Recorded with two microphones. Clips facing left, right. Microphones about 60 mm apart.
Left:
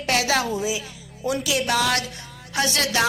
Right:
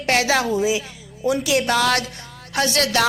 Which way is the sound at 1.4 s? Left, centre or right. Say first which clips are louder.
Right 3 dB; right.